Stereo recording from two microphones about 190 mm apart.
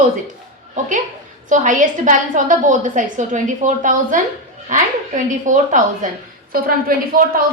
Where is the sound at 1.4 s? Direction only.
40° right (ahead or behind).